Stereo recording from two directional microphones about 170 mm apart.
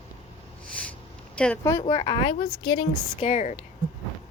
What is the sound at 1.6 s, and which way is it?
A woman's voice, 15° left (ahead or behind).